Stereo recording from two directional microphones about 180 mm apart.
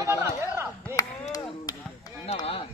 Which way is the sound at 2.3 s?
30° left (ahead or behind).